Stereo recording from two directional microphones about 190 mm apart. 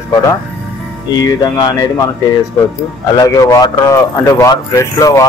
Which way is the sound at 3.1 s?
20° left (ahead or behind).